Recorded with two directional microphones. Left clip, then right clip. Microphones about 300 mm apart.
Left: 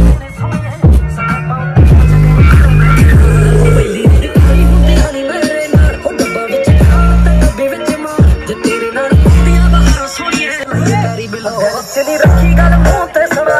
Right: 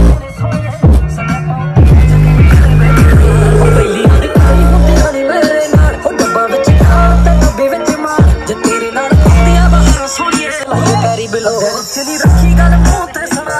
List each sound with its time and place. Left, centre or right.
3.0 s music: right
4.4 s music: centre
4.8 s music: right
5.7 s music: centre
10.8 s music: centre